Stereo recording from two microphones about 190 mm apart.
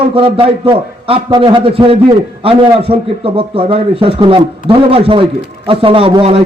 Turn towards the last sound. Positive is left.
turn(degrees=-30)  # may be behind; listen again after turning